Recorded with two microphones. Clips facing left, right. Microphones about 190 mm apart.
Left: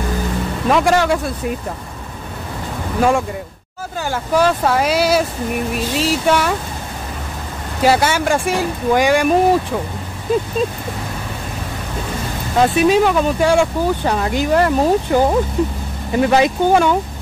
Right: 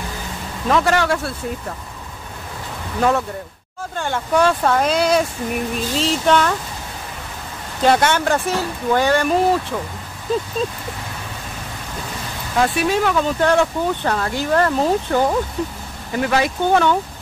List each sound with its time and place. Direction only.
0.7 s speech: 15° left (ahead or behind)
3.0 s speech: 10° left (ahead or behind)
7.8 s speech: 5° left (ahead or behind)
12.5 s speech: 20° left (ahead or behind)
16.6 s speech: 10° left (ahead or behind)